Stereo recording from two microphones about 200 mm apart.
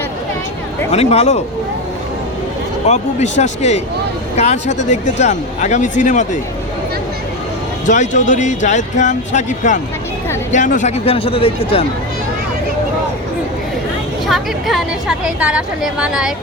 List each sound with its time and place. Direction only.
0.9 s speech: 30° left (ahead or behind)
2.8 s speech: 35° left (ahead or behind)
7.9 s speech: 40° left (ahead or behind)
14.3 s a woman's voice: centre (ahead or behind)